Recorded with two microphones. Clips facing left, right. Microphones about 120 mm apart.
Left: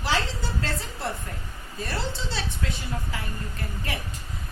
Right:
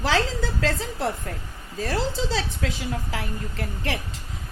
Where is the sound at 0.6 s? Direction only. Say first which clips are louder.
Right 8 dB; 90° right.